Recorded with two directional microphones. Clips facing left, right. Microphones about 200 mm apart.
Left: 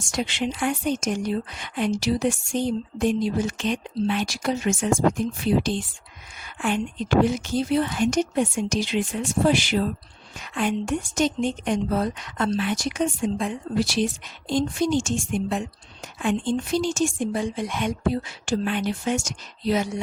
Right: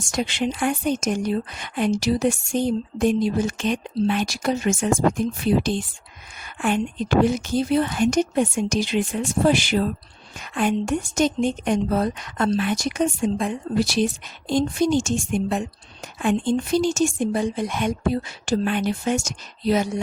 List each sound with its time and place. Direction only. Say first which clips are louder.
0.0 s a woman's voice: right 2 dB; 45° right (ahead or behind)
7.3 s a woman's voice: right 2 dB; 45° right (ahead or behind)